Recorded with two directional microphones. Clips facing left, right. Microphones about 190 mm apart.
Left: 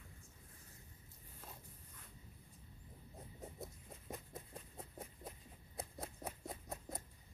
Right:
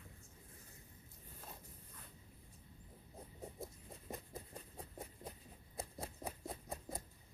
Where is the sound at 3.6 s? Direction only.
Centre (ahead or behind).